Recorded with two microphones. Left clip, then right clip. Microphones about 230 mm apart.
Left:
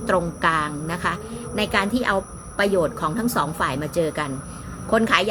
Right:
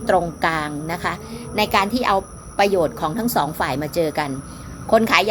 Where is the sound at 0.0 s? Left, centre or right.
Centre.